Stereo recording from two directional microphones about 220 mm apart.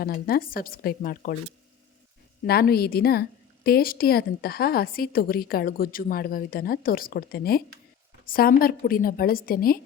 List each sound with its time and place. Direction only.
0.0 s a woman's voice: 40° left (ahead or behind)
2.5 s a woman's voice: 45° left (ahead or behind)